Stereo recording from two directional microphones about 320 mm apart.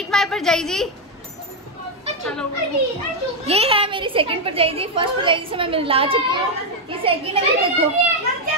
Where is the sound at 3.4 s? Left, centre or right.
Centre.